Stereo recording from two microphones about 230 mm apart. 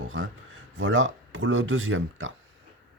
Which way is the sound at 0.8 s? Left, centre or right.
Right.